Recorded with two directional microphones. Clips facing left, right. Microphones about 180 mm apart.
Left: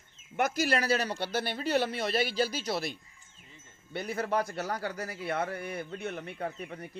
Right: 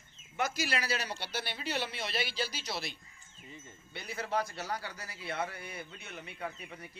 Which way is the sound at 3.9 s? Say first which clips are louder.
Left 5 dB; 50° left (ahead or behind).